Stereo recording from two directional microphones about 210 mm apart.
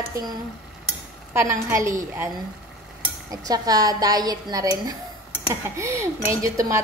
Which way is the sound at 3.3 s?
15° right (ahead or behind).